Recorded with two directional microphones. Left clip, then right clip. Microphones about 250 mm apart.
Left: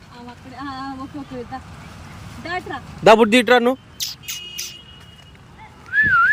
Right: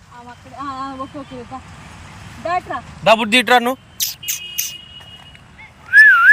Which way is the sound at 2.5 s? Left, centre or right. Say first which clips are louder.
Right 6 dB; centre.